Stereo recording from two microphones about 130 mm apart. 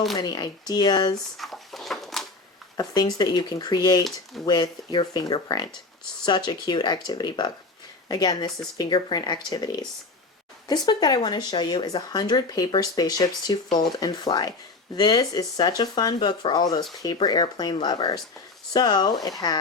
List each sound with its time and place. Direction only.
0.2 s speech: 30° left (ahead or behind)
1.4 s a sound: centre (ahead or behind)
2.7 s speech: 30° left (ahead or behind)